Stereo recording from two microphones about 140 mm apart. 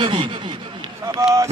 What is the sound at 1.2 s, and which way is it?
Speech, 20° right (ahead or behind).